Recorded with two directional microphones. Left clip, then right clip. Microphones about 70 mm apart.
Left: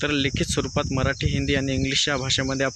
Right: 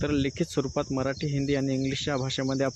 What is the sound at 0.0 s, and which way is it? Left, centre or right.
Speech, centre.